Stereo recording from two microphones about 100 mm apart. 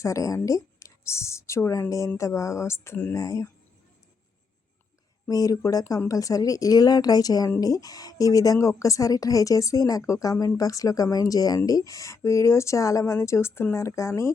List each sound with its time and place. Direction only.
0.0 s a woman's voice: 30° left (ahead or behind)
5.3 s speech: 35° left (ahead or behind)